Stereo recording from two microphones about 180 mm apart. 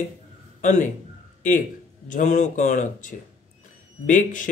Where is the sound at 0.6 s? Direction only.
45° left (ahead or behind).